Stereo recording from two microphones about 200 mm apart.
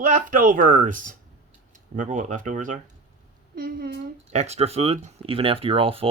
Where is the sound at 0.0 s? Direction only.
40° right (ahead or behind).